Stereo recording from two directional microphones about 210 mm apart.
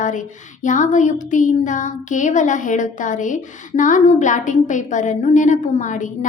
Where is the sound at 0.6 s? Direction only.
35° left (ahead or behind).